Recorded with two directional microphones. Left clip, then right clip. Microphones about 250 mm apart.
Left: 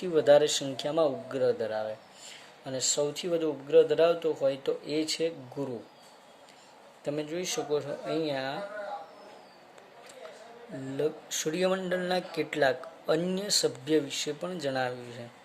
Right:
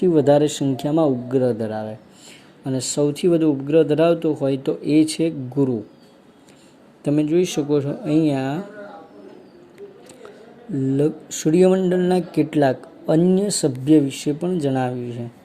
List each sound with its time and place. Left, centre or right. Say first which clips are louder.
0.0 s speech: right 6 dB; centre
7.0 s speech: right 14 dB; right
10.9 s speech: right 7 dB; centre